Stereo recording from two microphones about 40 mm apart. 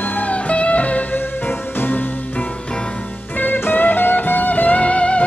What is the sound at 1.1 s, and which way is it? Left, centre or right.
Music, left.